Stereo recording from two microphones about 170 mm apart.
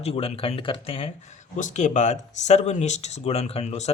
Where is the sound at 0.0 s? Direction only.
35° left (ahead or behind).